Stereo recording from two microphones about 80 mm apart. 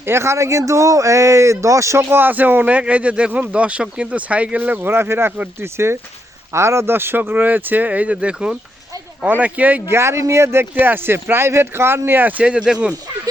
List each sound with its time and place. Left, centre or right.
0.0 s speech: right
9.9 s speech: right; by 12.9 s centre